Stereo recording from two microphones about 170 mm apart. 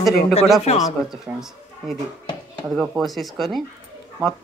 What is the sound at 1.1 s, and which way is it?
Speech, centre (ahead or behind).